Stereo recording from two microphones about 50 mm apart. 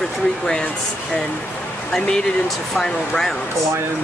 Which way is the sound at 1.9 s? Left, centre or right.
Centre.